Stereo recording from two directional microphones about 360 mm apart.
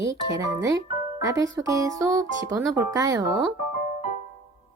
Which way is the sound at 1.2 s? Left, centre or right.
Centre.